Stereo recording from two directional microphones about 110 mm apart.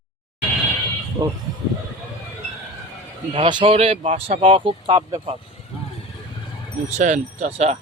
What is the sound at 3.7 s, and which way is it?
Speech, 70° right (ahead or behind).